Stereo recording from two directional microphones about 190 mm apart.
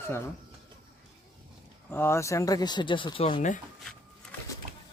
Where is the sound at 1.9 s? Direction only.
15° left (ahead or behind).